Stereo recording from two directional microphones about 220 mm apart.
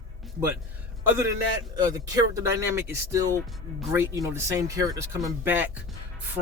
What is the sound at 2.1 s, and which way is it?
Speech, 15° right (ahead or behind).